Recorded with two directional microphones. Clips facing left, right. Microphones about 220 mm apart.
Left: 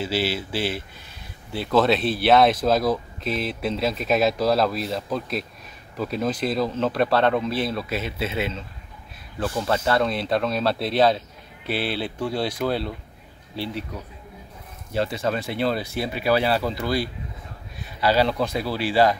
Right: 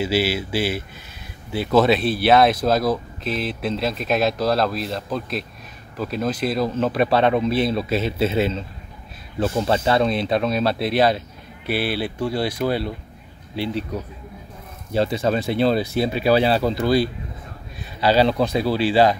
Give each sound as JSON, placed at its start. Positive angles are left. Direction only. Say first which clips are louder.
{"t": 0.0, "sound": "speech", "louder": "right 4 dB", "side_deg": -10}
{"t": 15.0, "sound": "speech", "louder": "right 4 dB", "side_deg": -25}